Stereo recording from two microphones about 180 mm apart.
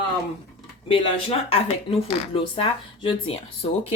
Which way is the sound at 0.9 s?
30° left (ahead or behind).